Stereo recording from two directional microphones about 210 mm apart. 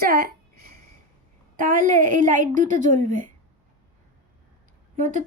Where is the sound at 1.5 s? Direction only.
40° right (ahead or behind).